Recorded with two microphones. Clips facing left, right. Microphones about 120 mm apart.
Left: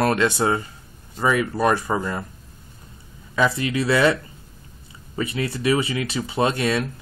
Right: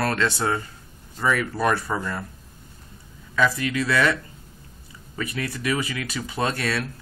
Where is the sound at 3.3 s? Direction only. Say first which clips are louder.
Left 1 dB; 25° left (ahead or behind).